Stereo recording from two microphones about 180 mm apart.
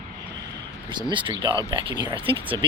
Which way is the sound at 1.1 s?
25° right (ahead or behind).